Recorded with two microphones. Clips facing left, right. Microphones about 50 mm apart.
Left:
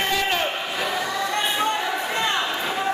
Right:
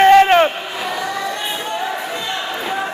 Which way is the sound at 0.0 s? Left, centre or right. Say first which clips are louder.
Right 14 dB; right.